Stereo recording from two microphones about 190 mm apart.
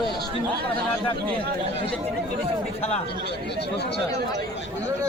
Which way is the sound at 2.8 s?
35° left (ahead or behind).